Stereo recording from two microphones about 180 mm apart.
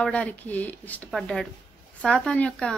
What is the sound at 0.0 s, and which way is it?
A woman's voice, 5° left (ahead or behind).